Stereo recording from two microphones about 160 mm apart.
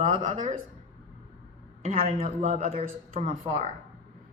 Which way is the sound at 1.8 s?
55° right (ahead or behind).